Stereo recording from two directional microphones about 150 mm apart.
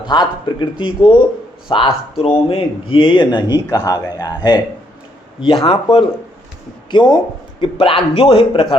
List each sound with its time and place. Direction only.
0.1 s a man's voice: 30° left (ahead or behind)